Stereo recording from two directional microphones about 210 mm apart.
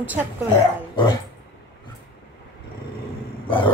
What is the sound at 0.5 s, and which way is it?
Speech, 25° left (ahead or behind).